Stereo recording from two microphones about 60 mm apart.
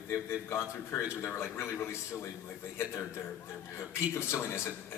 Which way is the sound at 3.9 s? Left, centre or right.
Left.